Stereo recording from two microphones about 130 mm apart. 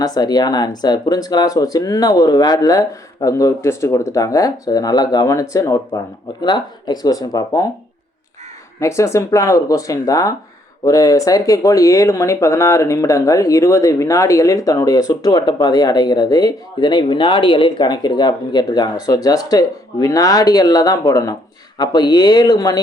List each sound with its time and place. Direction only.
0.0 s speech: 30° left (ahead or behind)
8.8 s speech: 20° left (ahead or behind)